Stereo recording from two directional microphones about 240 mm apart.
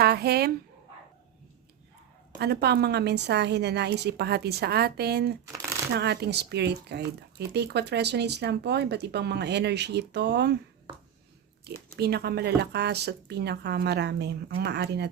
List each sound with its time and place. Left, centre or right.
0.0 s speech: right
2.4 s speech: right
11.6 s speech: right